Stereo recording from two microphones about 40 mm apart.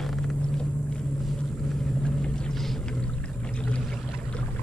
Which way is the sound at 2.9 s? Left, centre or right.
Left.